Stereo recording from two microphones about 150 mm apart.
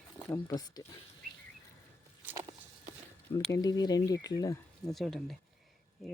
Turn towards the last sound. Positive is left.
turn(degrees=0)  # may be behind; listen again after turning